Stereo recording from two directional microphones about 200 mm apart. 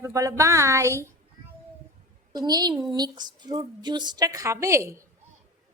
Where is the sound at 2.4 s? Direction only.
20° right (ahead or behind).